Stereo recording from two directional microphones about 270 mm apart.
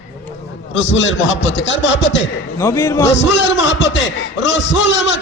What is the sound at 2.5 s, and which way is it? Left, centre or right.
Speech, centre.